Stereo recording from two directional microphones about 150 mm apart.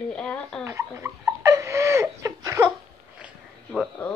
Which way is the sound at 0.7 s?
20° right (ahead or behind).